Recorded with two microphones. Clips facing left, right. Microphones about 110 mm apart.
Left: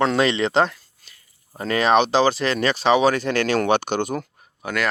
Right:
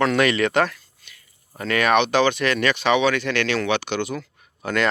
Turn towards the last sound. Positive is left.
turn(degrees=10)  # may be behind; listen again after turning